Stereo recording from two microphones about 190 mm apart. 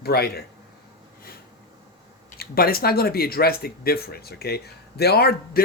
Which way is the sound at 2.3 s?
55° left (ahead or behind).